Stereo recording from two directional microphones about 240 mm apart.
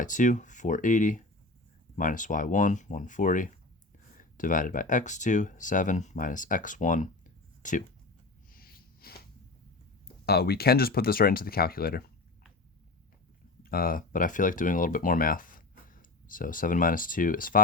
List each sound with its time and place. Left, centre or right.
0.0 s speech: left
8.5 s a sound: left
10.2 s speech: left
13.6 s speech: left